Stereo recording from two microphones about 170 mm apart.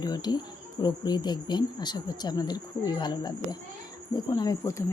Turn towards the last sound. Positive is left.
turn(degrees=20)  # may be behind; listen again after turning